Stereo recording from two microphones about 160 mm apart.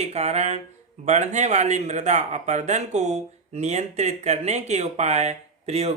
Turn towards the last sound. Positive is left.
turn(degrees=-40)  # may be behind; listen again after turning